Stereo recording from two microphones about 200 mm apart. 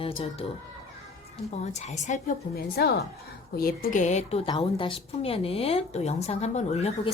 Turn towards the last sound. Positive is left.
turn(degrees=35)  # may be behind; listen again after turning